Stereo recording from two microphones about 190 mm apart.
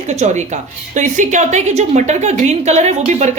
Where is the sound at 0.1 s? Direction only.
35° right (ahead or behind).